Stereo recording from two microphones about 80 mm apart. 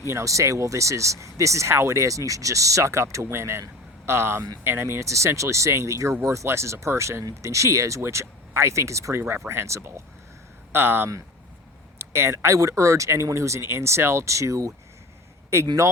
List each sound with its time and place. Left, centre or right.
0.1 s speech: right